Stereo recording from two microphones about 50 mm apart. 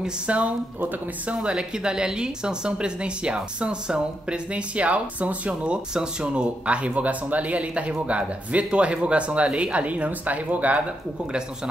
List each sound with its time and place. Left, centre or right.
0.3 s speech: right
1.3 s speech: right